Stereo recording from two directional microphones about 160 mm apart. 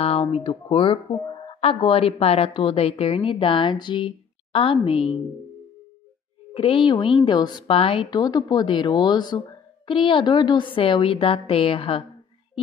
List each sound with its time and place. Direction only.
0.0 s speech: 40° left (ahead or behind)
6.5 s a woman's voice: 35° left (ahead or behind)